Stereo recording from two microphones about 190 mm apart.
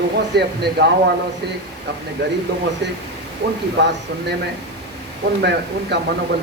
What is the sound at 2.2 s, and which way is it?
A woman's voice, 60° right (ahead or behind).